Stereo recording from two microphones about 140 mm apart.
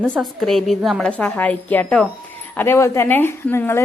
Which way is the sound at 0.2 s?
Centre (ahead or behind).